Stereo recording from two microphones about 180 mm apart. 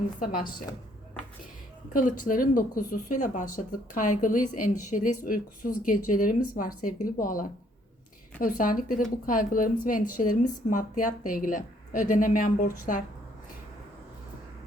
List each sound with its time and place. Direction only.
0.2 s a woman's voice: 55° left (ahead or behind)
1.9 s a woman's voice: 50° left (ahead or behind)